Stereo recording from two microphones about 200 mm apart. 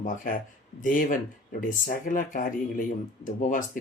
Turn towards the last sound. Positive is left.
turn(degrees=40)  # may be behind; listen again after turning